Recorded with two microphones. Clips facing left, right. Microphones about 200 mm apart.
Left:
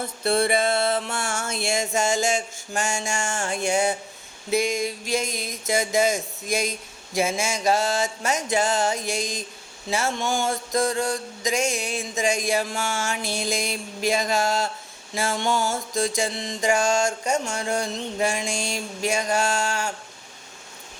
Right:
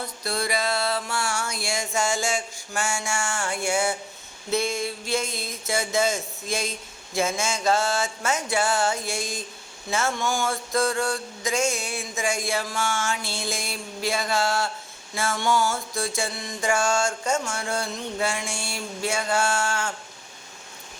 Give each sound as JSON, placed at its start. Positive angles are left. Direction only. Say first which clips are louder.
{"t": 0.0, "sound": "mantra", "louder": "left 7 dB", "side_deg": 25}
{"t": 1.1, "sound": "a sound", "louder": "even", "side_deg": 50}
{"t": 1.5, "sound": "mantra", "louder": "left 4 dB", "side_deg": 25}
{"t": 3.2, "sound": "music", "louder": "left 1 dB", "side_deg": 40}
{"t": 3.5, "sound": "mantra", "louder": "left 3 dB", "side_deg": 20}
{"t": 4.4, "sound": "a sound", "louder": "left 2 dB", "side_deg": 15}
{"t": 9.9, "sound": "mantra", "louder": "left 1 dB", "side_deg": 15}
{"t": 12.7, "sound": "music", "louder": "even", "side_deg": 40}
{"t": 13.1, "sound": "mantra", "louder": "left 3 dB", "side_deg": 15}
{"t": 19.0, "sound": "a sound", "louder": "left 1 dB", "side_deg": 15}